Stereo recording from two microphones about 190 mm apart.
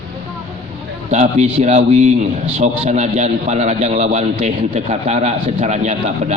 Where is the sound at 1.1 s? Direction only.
35° right (ahead or behind).